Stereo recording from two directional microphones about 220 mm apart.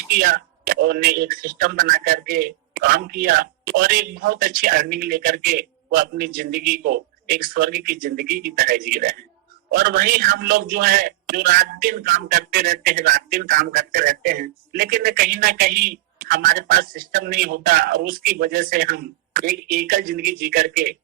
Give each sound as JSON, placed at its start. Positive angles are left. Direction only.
{"t": 0.1, "sound": "a man's voice", "side_deg": -40}